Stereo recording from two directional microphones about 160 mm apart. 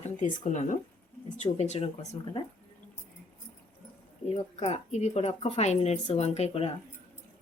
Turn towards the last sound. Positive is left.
turn(degrees=40)  # may be behind; listen again after turning